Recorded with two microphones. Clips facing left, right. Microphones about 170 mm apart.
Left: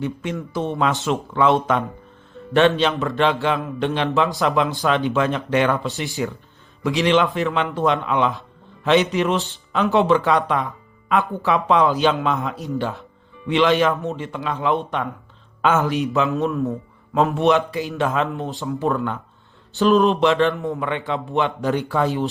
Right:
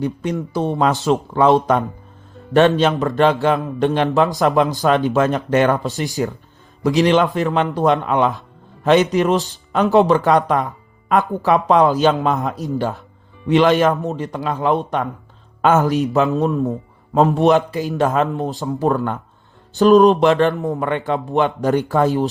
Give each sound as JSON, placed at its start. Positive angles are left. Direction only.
{"t": 0.0, "sound": "a man's voice", "side_deg": -40}